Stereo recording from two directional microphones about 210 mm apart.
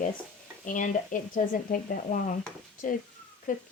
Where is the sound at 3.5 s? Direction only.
40° left (ahead or behind).